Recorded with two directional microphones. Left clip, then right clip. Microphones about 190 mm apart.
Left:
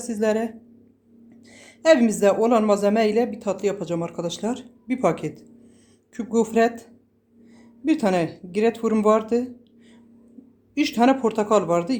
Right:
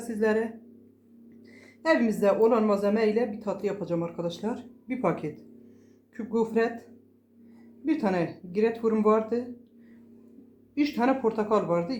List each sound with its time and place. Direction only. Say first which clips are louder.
0.1 s a woman's voice: left 3 dB; 55° left (ahead or behind)
7.9 s a woman's voice: left 6 dB; 55° left (ahead or behind)
10.8 s a woman's voice: left 6 dB; 55° left (ahead or behind)